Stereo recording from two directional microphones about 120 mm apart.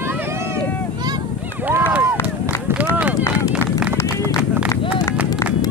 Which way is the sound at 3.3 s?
5° right (ahead or behind).